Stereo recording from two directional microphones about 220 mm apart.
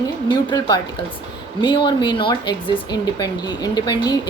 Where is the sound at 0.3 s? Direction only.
20° left (ahead or behind).